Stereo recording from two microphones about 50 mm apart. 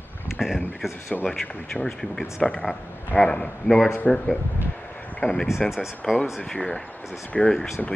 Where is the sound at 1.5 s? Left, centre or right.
Left.